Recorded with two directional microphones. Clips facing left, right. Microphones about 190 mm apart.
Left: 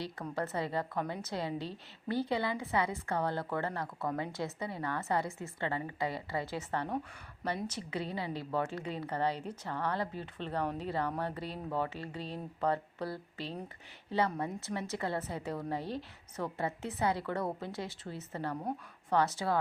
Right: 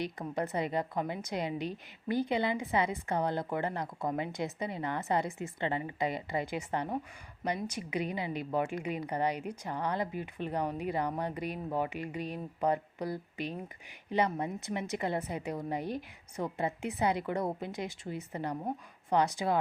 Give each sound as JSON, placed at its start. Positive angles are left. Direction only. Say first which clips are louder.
{"t": 0.0, "sound": "a woman's voice", "louder": "right 3 dB", "side_deg": -15}